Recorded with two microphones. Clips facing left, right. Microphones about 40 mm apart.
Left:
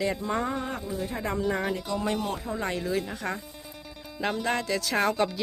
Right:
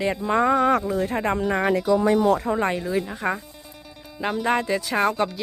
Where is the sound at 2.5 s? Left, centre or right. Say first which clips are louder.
Right 8 dB; right.